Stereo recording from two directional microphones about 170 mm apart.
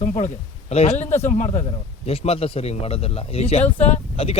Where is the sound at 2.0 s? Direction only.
35° left (ahead or behind).